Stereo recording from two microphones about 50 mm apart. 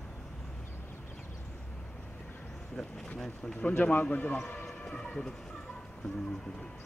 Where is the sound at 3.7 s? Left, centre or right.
Left.